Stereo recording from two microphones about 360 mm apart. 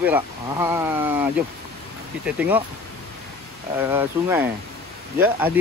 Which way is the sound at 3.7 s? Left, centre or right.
Centre.